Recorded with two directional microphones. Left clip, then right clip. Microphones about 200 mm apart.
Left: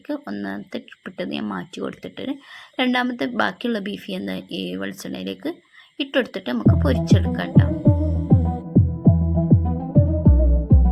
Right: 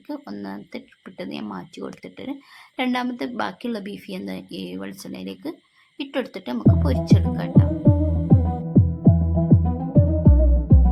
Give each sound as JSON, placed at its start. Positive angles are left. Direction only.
{"t": 0.1, "sound": "speech", "side_deg": 15}
{"t": 7.9, "sound": "music", "side_deg": 0}